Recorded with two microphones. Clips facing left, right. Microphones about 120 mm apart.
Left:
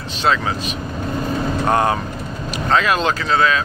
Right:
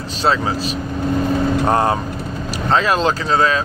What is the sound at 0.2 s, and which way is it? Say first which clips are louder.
Speech: right 1 dB; 35° right (ahead or behind).